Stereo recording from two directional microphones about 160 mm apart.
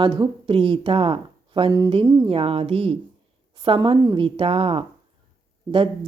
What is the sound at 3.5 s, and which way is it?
Speech, 35° right (ahead or behind).